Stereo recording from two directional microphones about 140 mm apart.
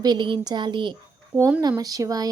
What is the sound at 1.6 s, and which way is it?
Speech, 25° right (ahead or behind).